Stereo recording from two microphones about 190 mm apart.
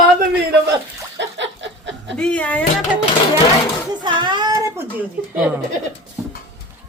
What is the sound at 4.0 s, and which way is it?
Speech, 25° right (ahead or behind).